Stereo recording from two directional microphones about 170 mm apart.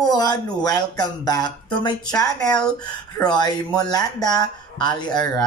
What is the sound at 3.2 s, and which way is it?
Speech, 25° left (ahead or behind).